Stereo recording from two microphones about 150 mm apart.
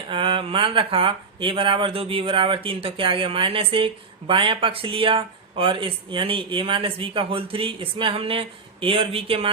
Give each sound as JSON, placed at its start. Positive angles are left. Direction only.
{"t": 0.1, "sound": "speech", "side_deg": -35}